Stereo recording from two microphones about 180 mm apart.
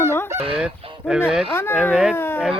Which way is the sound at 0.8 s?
30° right (ahead or behind).